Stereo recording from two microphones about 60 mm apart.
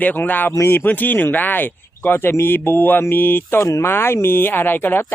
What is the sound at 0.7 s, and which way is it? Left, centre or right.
Speech, left.